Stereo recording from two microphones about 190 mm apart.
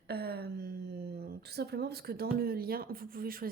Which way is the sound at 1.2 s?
60° right (ahead or behind).